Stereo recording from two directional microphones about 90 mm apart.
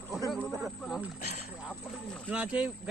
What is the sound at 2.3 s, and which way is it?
Speech, 15° right (ahead or behind).